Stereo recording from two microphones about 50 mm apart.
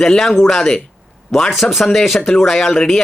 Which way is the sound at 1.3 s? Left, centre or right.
Centre.